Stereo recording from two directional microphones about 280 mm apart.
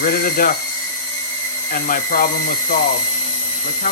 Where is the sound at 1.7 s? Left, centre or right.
Left.